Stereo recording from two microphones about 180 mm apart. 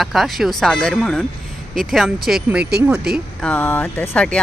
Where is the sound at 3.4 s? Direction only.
10° left (ahead or behind).